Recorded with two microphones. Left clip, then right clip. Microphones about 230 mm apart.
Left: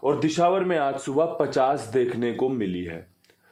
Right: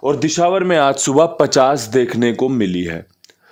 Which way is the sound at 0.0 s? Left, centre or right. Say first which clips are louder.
Right 6 dB; right.